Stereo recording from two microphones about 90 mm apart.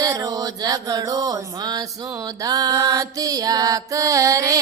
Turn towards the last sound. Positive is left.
turn(degrees=-40)  # may be behind; listen again after turning